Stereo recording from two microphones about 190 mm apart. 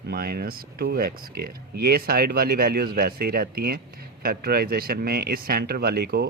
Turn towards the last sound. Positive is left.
turn(degrees=-55)  # may be behind; listen again after turning